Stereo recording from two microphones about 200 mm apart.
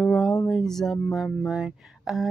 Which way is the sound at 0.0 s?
5° left (ahead or behind).